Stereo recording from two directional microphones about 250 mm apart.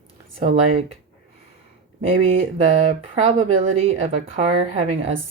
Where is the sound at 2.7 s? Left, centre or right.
Right.